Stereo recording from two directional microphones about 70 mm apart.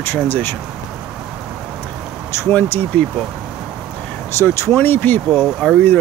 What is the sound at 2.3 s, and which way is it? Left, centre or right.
Speech, left.